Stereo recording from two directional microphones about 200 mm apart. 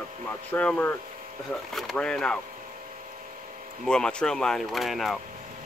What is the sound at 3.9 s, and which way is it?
Speech, 5° left (ahead or behind).